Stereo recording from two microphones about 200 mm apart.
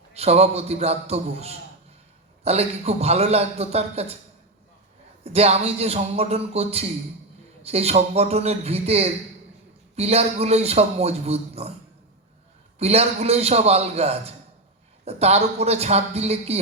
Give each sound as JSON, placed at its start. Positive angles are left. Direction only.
{"t": 0.1, "sound": "a man's voice", "side_deg": -30}
{"t": 5.2, "sound": "a man's voice", "side_deg": -30}
{"t": 12.8, "sound": "a man's voice", "side_deg": -30}